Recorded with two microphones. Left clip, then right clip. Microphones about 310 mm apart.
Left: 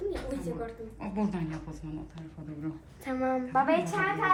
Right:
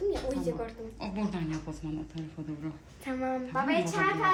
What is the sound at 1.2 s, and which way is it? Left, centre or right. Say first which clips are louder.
A woman's voice: left 2 dB; centre.